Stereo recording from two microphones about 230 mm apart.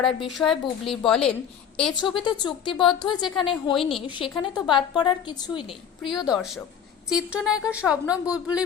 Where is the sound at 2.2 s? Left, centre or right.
Centre.